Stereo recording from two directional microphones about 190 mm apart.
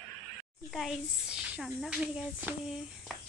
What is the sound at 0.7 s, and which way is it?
Speech, centre (ahead or behind).